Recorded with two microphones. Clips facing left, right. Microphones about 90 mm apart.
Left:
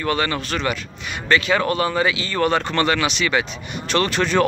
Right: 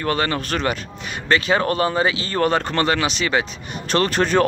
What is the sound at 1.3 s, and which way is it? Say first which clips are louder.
Speech: even; 35° right (ahead or behind).